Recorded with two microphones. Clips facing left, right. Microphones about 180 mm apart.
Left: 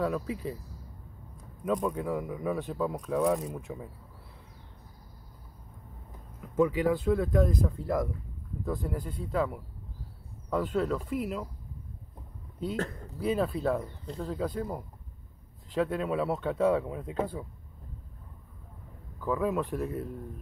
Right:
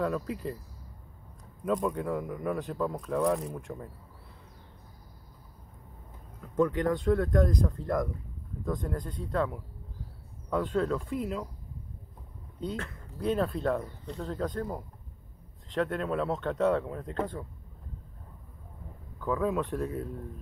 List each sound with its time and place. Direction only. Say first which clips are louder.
0.0 s speech: even; centre (ahead or behind)
1.6 s speech: even; centre (ahead or behind)
6.4 s speech: left 1 dB; 5° left (ahead or behind)
12.7 s speech: left 5 dB; 40° left (ahead or behind)
13.2 s speech: even; 5° left (ahead or behind)
19.1 s speech: even; 5° left (ahead or behind)